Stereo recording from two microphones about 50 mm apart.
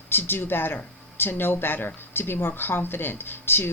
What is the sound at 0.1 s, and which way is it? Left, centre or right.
Speech, left.